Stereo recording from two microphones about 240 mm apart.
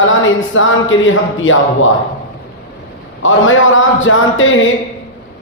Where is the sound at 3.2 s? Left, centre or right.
Left.